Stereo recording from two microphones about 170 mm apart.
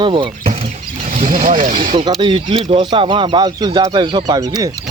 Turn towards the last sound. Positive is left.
turn(degrees=-20)  # may be behind; listen again after turning